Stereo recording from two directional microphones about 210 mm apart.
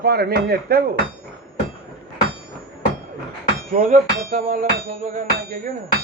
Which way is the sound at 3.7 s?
45° right (ahead or behind).